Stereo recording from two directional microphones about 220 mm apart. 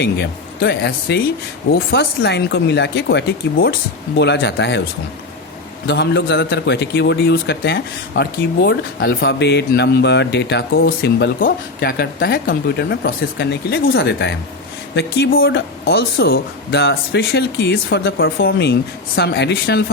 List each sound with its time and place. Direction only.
0.0 s a man's voice: 50° left (ahead or behind)
5.9 s a man's voice: 45° left (ahead or behind)